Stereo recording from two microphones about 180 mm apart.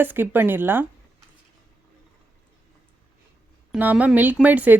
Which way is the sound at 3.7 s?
10° right (ahead or behind).